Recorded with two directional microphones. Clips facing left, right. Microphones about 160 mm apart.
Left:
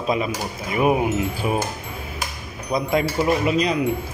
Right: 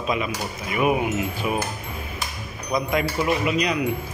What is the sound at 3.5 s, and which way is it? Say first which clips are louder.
Speech: left 3 dB; 30° left (ahead or behind).